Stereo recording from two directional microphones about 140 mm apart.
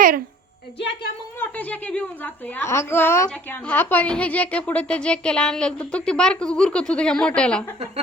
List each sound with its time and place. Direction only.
1.4 s a woman's voice: 10° left (ahead or behind)